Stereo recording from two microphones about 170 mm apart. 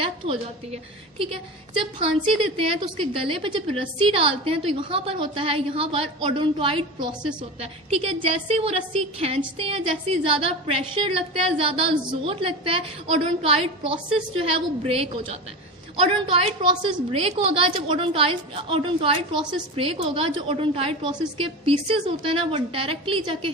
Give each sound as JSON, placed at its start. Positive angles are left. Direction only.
{"t": 0.0, "sound": "a woman's voice", "side_deg": -35}
{"t": 2.6, "sound": "a woman's voice", "side_deg": -30}